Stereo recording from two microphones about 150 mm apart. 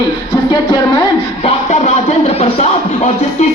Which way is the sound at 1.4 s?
45° left (ahead or behind).